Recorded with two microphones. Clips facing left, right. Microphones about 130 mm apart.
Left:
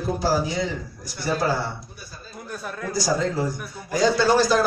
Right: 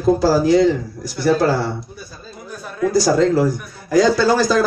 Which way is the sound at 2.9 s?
80° right.